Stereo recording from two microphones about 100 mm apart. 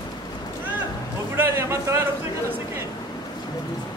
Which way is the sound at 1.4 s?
25° right (ahead or behind).